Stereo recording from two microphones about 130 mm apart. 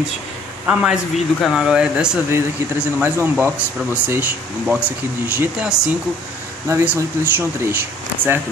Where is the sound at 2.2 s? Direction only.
15° right (ahead or behind).